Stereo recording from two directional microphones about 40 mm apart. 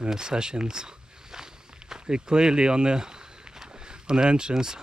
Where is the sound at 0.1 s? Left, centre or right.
Centre.